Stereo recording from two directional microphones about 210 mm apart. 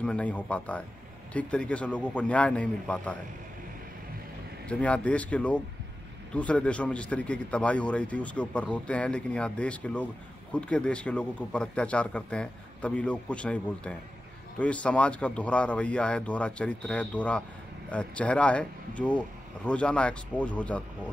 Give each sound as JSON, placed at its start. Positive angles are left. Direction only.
{"t": 0.0, "sound": "a man's voice", "side_deg": 5}
{"t": 4.6, "sound": "a man's voice", "side_deg": 5}